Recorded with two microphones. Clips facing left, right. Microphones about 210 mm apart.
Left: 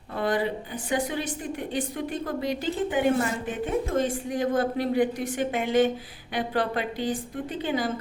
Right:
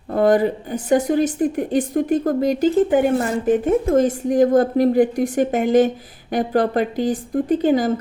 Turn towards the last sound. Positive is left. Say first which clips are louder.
# right 11 dB
turn(degrees=-45)  # may be behind; listen again after turning